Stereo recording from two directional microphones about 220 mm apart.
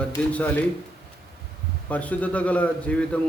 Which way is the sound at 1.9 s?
5° left (ahead or behind).